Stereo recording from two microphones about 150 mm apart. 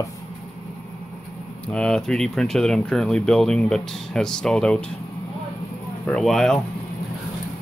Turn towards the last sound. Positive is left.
turn(degrees=0)  # may be behind; listen again after turning